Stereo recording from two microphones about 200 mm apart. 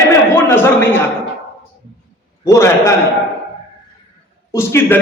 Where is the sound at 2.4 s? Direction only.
15° left (ahead or behind).